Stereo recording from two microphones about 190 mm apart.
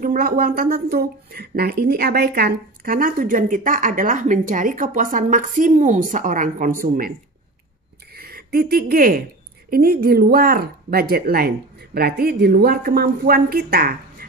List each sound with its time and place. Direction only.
0.0 s speech: 45° right (ahead or behind)
8.2 s speech: 50° right (ahead or behind)